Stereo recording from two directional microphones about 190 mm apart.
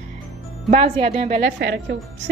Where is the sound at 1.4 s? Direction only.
60° right (ahead or behind).